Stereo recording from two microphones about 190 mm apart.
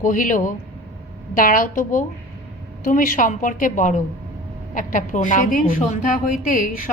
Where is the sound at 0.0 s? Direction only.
45° left (ahead or behind).